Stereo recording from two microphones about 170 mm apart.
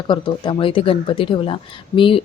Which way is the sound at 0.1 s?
30° left (ahead or behind).